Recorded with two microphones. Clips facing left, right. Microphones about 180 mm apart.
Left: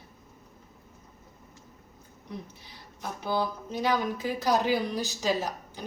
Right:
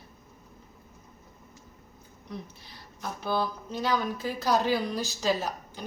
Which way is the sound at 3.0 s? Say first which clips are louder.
Even; 15° left (ahead or behind).